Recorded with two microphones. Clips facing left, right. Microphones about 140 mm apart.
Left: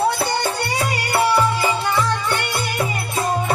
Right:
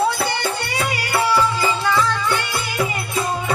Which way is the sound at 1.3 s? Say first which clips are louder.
Left 1 dB; 25° left (ahead or behind).